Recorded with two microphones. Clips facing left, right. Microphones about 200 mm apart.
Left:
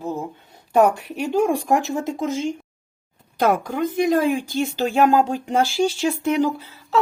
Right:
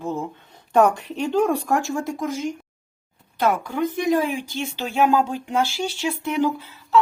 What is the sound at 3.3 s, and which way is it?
Speech, 45° left (ahead or behind).